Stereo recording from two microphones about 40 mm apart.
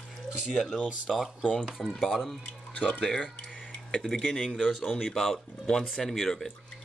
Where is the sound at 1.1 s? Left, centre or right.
Centre.